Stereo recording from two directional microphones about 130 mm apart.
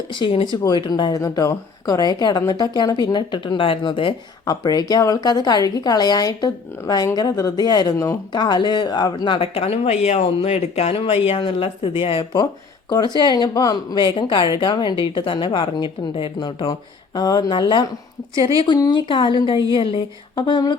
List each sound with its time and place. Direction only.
0.1 s speech: 40° left (ahead or behind); by 8.2 s 25° left (ahead or behind)
8.3 s speech: 35° left (ahead or behind)